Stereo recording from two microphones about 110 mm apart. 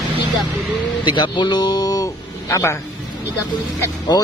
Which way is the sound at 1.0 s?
45° left (ahead or behind).